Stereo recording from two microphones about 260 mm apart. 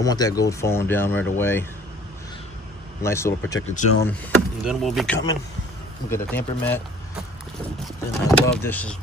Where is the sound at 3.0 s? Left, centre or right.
Centre.